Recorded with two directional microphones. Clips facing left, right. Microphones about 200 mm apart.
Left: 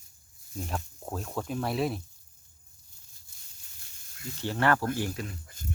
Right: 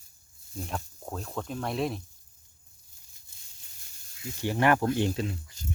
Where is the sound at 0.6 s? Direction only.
Centre (ahead or behind).